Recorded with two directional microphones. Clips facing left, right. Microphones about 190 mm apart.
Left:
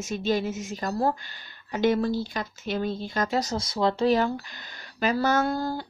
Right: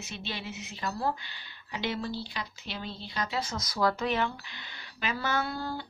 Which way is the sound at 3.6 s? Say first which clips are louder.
Left 4 dB; 25° left (ahead or behind).